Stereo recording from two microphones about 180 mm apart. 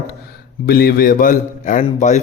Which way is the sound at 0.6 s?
60° left (ahead or behind).